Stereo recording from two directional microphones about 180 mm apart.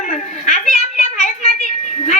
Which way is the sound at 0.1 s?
40° left (ahead or behind).